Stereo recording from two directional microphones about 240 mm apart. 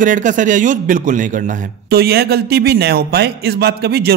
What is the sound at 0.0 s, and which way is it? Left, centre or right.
A man's voice, right.